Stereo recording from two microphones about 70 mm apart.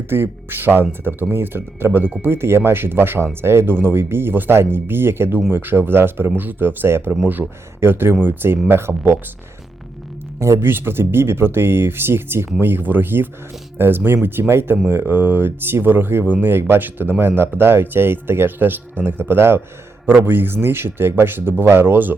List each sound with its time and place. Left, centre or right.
0.1 s speech: right
10.4 s speech: right